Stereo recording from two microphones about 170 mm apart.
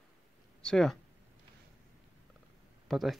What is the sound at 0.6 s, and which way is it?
Speech, 5° left (ahead or behind).